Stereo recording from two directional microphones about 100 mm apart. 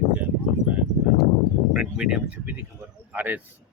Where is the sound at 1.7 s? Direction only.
10° right (ahead or behind).